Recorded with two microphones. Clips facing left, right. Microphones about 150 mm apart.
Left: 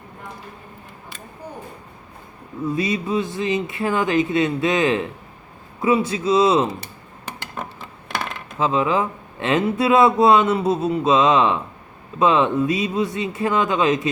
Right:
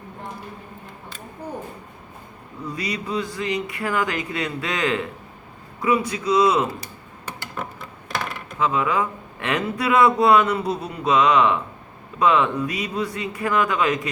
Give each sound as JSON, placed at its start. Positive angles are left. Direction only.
{"t": 2.6, "sound": "speech", "side_deg": 25}
{"t": 8.5, "sound": "speech", "side_deg": 25}